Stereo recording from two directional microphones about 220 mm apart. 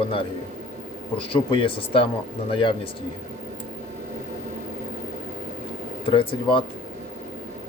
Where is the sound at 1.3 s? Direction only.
25° left (ahead or behind).